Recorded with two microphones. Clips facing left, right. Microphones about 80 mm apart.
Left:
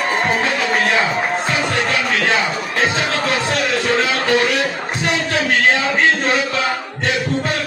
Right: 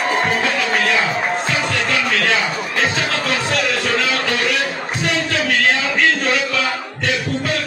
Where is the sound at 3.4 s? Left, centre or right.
Left.